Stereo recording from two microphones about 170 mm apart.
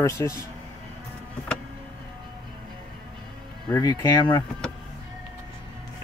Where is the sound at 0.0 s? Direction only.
15° left (ahead or behind).